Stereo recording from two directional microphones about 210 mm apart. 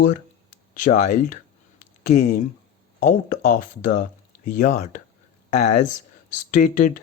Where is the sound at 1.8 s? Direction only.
35° left (ahead or behind).